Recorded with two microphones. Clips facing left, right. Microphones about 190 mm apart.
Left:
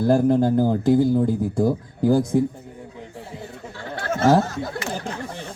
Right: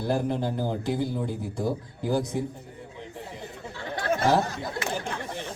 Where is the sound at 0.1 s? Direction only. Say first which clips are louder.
Left 9 dB; 50° left (ahead or behind).